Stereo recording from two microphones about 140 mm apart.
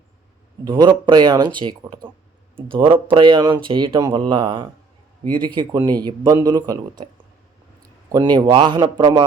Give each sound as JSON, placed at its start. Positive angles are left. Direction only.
{"t": 0.6, "sound": "a man's voice", "side_deg": -35}
{"t": 8.1, "sound": "speech", "side_deg": -30}